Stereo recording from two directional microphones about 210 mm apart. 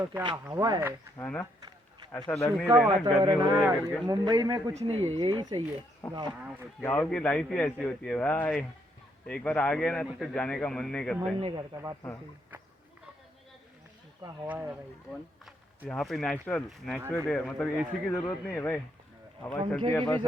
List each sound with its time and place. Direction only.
0.2 s speech: 20° right (ahead or behind)
1.2 s speech: 5° left (ahead or behind)
2.6 s speech: 10° right (ahead or behind)
6.0 s a man's voice: 5° left (ahead or behind)
11.3 s a man's voice: 25° right (ahead or behind)
14.2 s speech: 10° right (ahead or behind)
15.9 s a man's voice: centre (ahead or behind)